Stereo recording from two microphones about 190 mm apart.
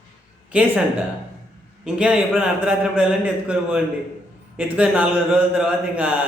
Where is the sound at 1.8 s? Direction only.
5° right (ahead or behind).